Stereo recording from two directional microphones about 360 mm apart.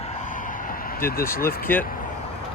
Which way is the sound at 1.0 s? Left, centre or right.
Left.